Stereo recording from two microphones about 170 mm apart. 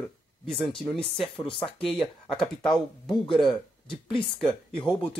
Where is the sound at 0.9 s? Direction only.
Centre (ahead or behind).